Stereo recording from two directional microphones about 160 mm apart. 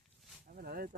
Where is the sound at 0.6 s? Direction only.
60° right (ahead or behind).